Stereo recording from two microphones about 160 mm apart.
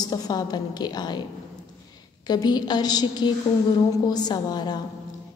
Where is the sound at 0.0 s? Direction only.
25° left (ahead or behind).